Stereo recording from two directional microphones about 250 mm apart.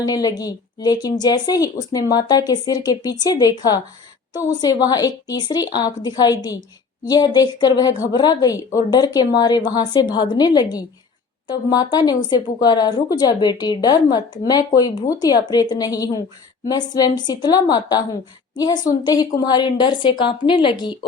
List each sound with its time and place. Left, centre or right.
0.0 s speech: centre